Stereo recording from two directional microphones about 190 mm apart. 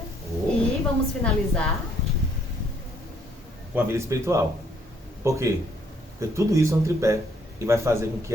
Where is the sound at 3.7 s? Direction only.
15° right (ahead or behind).